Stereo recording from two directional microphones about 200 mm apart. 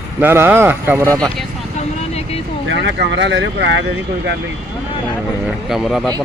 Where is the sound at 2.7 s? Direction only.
65° right (ahead or behind).